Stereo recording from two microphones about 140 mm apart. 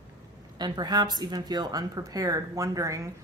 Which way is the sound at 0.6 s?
30° right (ahead or behind).